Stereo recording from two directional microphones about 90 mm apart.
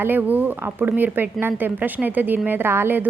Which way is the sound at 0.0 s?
20° right (ahead or behind).